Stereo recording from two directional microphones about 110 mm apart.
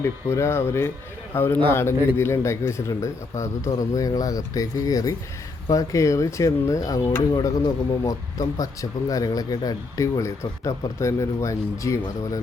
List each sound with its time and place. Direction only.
0.0 s a man's voice: 25° left (ahead or behind)
7.3 s speech: 35° left (ahead or behind)